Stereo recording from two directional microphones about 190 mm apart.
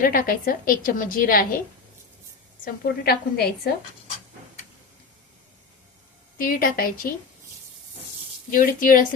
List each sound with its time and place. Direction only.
0.0 s a woman's voice: 50° left (ahead or behind)
2.6 s a woman's voice: 55° left (ahead or behind)
6.4 s a woman's voice: 45° left (ahead or behind)
8.4 s a woman's voice: 45° left (ahead or behind)